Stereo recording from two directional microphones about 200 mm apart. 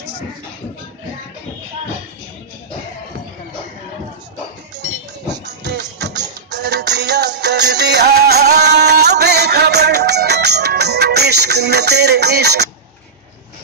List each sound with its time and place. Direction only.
5.3 s music: 60° right (ahead or behind)